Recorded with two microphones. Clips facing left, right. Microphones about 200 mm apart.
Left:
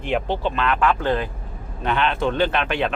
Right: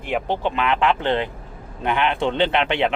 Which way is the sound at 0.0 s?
10° right (ahead or behind).